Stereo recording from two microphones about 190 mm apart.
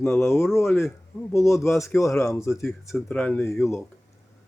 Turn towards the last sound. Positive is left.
turn(degrees=15)  # may be behind; listen again after turning